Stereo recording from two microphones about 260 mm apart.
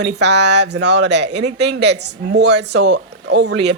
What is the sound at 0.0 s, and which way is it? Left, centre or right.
Speech, right.